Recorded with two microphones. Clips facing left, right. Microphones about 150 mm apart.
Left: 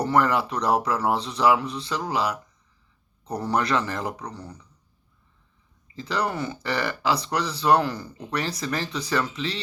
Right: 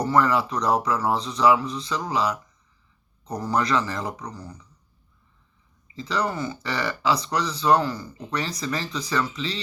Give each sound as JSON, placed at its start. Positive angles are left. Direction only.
{"t": 0.0, "sound": "speech", "side_deg": 55}
{"t": 3.2, "sound": "a man's voice", "side_deg": 30}
{"t": 3.5, "sound": "speech", "side_deg": 60}
{"t": 6.1, "sound": "speech", "side_deg": 60}